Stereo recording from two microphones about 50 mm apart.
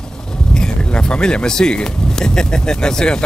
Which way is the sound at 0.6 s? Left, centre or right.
Centre.